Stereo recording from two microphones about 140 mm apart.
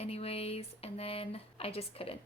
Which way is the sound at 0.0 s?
45° left (ahead or behind).